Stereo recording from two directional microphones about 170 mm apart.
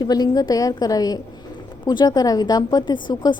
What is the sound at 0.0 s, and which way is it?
A woman's voice, 25° left (ahead or behind).